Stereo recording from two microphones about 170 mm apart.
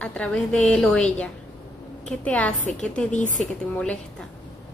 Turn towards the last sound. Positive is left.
turn(degrees=5)  # may be behind; listen again after turning